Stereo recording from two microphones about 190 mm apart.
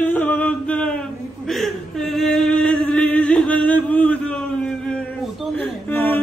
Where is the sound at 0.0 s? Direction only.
10° left (ahead or behind).